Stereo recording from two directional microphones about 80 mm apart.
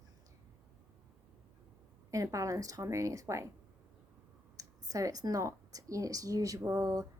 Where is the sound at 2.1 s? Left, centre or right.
Right.